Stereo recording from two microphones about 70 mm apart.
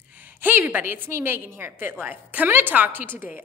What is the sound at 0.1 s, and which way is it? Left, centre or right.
A woman's voice, right.